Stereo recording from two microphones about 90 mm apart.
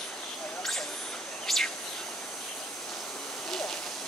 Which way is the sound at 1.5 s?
5° left (ahead or behind).